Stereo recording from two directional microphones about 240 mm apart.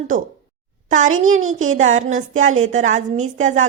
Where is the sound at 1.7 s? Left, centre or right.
Right.